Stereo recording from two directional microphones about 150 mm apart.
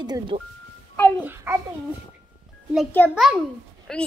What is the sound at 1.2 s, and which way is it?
Speech, 15° right (ahead or behind).